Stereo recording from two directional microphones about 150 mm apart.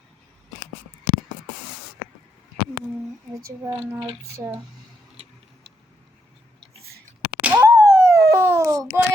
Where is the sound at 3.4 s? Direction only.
20° right (ahead or behind).